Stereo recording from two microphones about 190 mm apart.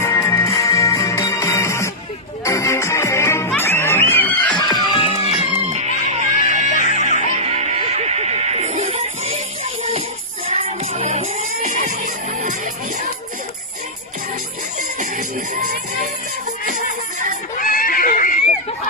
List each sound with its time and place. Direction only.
0.0 s music: 15° left (ahead or behind)
4.6 s music: 25° left (ahead or behind)
5.7 s music: 35° right (ahead or behind)
6.3 s music: 40° left (ahead or behind)
6.9 s music: 40° right (ahead or behind)
10.5 s music: 35° right (ahead or behind)
15.1 s music: 50° right (ahead or behind)
17.6 s a sound: 45° left (ahead or behind)